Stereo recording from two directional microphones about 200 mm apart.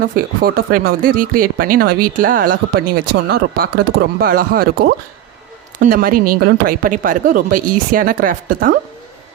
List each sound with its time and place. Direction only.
0.0 s speech: 45° right (ahead or behind)